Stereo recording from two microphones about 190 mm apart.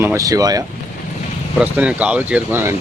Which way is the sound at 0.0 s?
15° right (ahead or behind).